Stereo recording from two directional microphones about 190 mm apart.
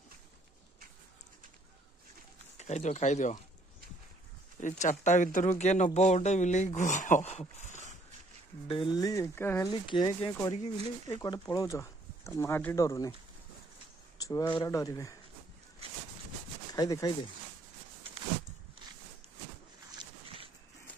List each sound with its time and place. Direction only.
2.5 s speech: 35° left (ahead or behind)
4.6 s speech: 40° left (ahead or behind)
8.6 s speech: 25° left (ahead or behind)
9.7 s speech: 25° left (ahead or behind)
14.2 s speech: 20° left (ahead or behind)
15.8 s a sound: 30° right (ahead or behind)
16.7 s speech: 20° left (ahead or behind)